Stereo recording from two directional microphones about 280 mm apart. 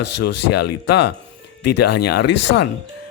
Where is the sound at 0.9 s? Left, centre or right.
Left.